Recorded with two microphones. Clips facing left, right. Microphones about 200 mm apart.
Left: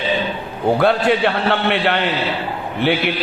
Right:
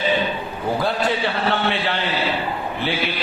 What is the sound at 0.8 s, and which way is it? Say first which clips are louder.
A man's voice: left 6 dB; 65° left (ahead or behind).